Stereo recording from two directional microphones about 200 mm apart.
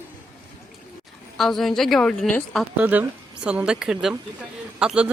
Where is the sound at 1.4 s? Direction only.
Centre (ahead or behind).